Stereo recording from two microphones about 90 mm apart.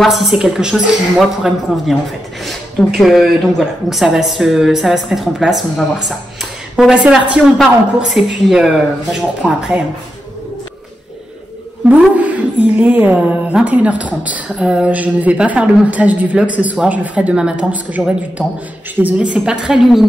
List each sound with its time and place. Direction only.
0.0 s speech: centre (ahead or behind)
3.0 s a woman's voice: centre (ahead or behind)
7.5 s a woman's voice: centre (ahead or behind)
12.2 s a woman's voice: 15° right (ahead or behind)